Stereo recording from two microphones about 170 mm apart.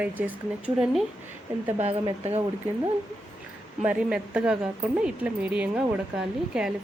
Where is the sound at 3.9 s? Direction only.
5° right (ahead or behind).